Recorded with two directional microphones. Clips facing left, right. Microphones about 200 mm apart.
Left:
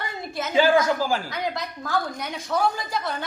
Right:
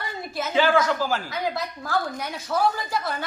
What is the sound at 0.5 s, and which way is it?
Speech, 10° left (ahead or behind).